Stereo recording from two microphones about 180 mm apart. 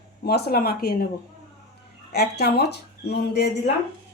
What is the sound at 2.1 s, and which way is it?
Speech, 65° left (ahead or behind).